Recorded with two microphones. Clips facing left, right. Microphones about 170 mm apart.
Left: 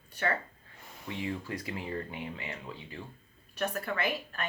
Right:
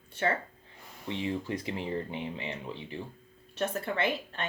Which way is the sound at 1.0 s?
25° right (ahead or behind).